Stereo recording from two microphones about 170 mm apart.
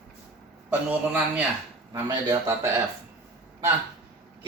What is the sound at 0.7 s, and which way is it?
Speech, 10° right (ahead or behind).